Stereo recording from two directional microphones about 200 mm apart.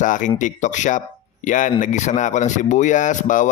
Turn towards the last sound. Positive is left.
turn(degrees=40)  # may be behind; listen again after turning